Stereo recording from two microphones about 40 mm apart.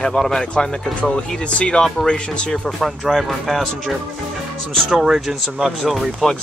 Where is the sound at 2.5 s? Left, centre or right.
Centre.